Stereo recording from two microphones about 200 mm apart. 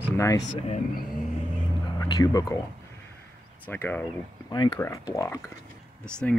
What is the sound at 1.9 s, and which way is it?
Speech, 20° left (ahead or behind).